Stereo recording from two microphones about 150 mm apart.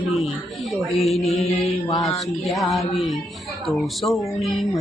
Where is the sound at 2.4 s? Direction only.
Centre (ahead or behind).